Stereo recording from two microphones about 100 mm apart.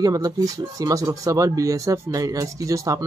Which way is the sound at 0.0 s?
40° right (ahead or behind).